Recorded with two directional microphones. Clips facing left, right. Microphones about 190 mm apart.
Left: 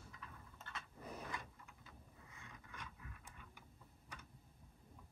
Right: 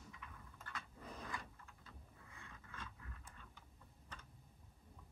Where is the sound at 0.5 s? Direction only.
25° left (ahead or behind).